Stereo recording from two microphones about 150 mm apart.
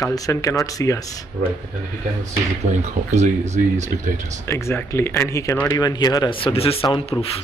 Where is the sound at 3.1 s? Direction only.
50° right (ahead or behind).